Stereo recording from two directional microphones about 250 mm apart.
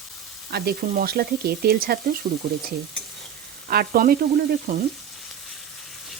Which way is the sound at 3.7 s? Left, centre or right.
Right.